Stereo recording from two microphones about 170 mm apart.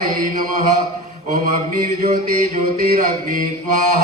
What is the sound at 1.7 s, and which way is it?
Speech, 55° right (ahead or behind).